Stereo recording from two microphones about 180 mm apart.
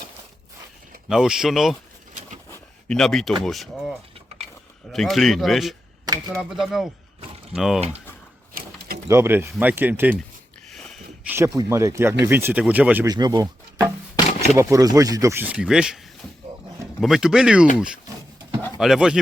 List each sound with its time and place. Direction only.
1.0 s speech: 5° right (ahead or behind)
2.5 s a sound: 5° left (ahead or behind)
3.4 s speech: centre (ahead or behind)
8.6 s a sound: 50° right (ahead or behind)
9.0 s speech: 15° right (ahead or behind)
10.7 s a sound: centre (ahead or behind)
11.3 s speech: 15° right (ahead or behind)
13.1 s speech: 20° right (ahead or behind); by 16.0 s 5° right (ahead or behind)
17.0 s speech: 5° right (ahead or behind)
18.8 s speech: centre (ahead or behind)